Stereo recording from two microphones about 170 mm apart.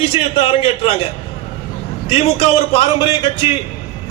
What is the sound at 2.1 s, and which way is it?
Speech, 35° left (ahead or behind).